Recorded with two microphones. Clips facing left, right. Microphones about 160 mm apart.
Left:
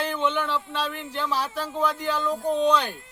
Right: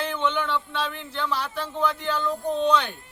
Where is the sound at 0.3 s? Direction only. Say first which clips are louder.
Even; 35° left (ahead or behind).